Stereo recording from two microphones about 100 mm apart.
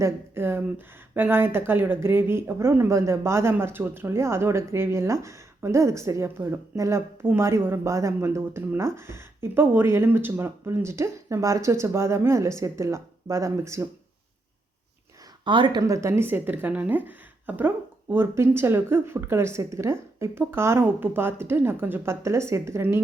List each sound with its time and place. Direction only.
0.0 s speech: 25° right (ahead or behind)
15.4 s speech: 50° right (ahead or behind)
15.9 s speech: 30° right (ahead or behind)